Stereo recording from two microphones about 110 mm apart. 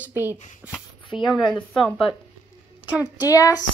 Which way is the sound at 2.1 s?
55° left (ahead or behind).